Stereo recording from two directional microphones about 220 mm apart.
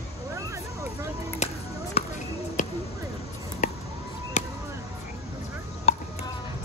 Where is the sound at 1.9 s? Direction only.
35° left (ahead or behind).